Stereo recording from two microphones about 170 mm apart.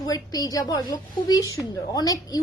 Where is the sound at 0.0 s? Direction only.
20° left (ahead or behind).